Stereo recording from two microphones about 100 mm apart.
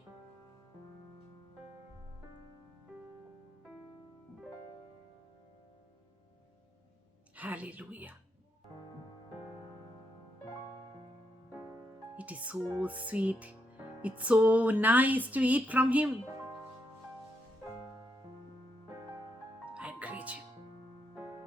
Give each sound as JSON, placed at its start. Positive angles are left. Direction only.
{"t": 7.3, "sound": "speech", "side_deg": -15}
{"t": 12.1, "sound": "music", "side_deg": -15}
{"t": 12.8, "sound": "speech", "side_deg": -15}
{"t": 19.6, "sound": "music", "side_deg": -15}